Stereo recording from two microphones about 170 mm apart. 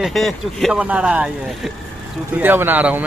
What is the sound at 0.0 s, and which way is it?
Speech, centre (ahead or behind).